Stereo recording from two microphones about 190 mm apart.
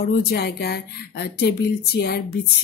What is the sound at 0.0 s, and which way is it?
Speech, 55° left (ahead or behind).